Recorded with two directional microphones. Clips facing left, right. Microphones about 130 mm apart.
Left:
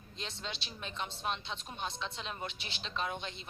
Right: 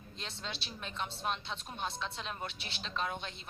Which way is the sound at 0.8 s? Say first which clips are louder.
Right 1 dB; centre (ahead or behind).